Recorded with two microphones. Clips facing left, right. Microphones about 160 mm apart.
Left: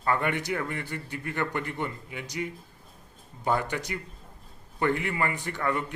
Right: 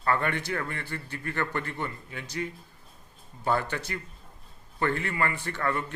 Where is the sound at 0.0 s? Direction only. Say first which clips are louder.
Even; 15° left (ahead or behind).